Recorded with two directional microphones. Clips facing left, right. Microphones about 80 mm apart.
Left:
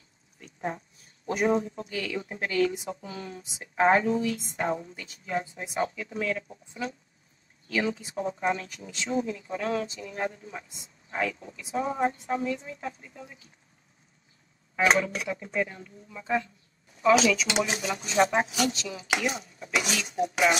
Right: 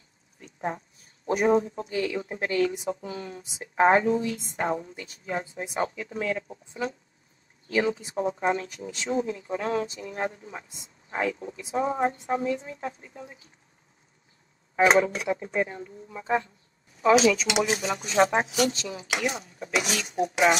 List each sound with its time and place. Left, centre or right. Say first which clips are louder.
1.2 s a woman's voice: right 3 dB; right
14.8 s a woman's voice: right 4 dB; right